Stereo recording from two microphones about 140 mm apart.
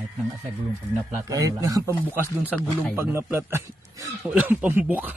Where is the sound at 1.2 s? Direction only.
25° right (ahead or behind).